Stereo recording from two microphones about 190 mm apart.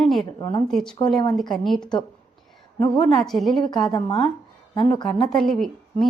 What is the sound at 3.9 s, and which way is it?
Speech, 20° left (ahead or behind).